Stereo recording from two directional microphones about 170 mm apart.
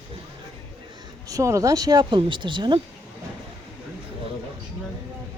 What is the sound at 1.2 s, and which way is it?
Speech, 20° right (ahead or behind).